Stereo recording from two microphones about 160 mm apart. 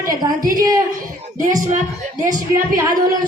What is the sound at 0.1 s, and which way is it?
Speech, 20° right (ahead or behind).